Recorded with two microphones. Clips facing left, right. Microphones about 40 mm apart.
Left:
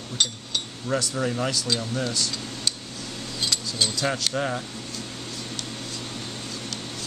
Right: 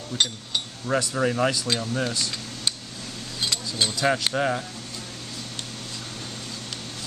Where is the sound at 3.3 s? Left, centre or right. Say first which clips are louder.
Even; right.